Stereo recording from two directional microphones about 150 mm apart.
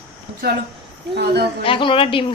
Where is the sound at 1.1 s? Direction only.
90° right.